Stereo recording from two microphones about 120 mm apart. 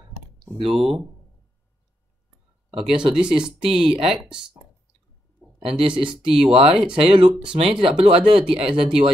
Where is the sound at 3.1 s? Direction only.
5° right (ahead or behind).